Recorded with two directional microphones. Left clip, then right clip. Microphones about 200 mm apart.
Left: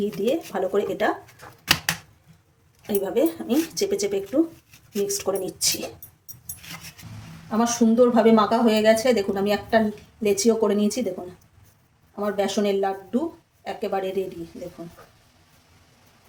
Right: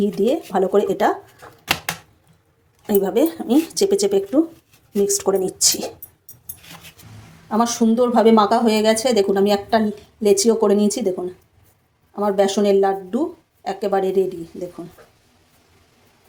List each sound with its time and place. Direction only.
0.0 s speech: 30° right (ahead or behind)
2.8 s speech: 35° right (ahead or behind)
7.5 s speech: 30° right (ahead or behind)
12.2 s speech: 30° right (ahead or behind)